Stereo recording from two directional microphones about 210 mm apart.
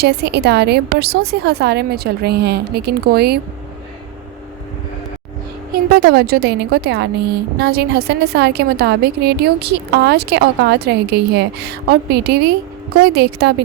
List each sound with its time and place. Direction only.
0.0 s a woman's voice: 50° right (ahead or behind)
5.7 s a woman's voice: 45° right (ahead or behind)